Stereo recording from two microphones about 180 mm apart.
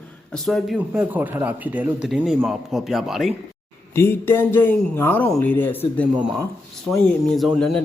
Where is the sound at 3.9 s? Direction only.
15° left (ahead or behind).